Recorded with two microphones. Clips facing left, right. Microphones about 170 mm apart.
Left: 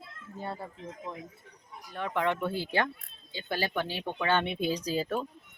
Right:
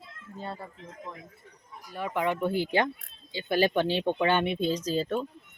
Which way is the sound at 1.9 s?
5° right (ahead or behind).